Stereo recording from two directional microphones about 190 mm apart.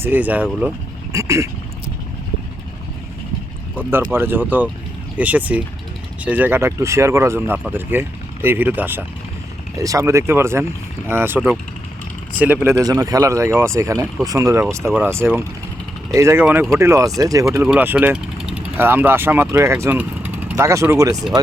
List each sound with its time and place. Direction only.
0.0 s speech: 10° right (ahead or behind)
3.8 s speech: 10° right (ahead or behind)